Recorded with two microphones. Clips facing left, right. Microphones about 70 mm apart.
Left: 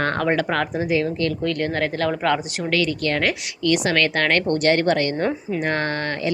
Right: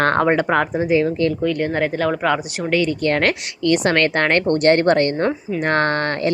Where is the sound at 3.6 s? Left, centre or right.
Right.